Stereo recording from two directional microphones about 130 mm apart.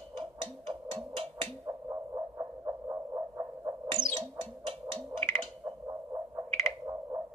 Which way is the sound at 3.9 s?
40° right (ahead or behind).